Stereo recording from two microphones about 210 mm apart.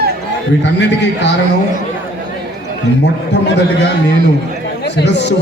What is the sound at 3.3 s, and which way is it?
Speech, 55° left (ahead or behind).